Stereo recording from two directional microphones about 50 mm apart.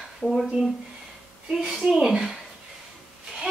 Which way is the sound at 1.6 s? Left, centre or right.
Centre.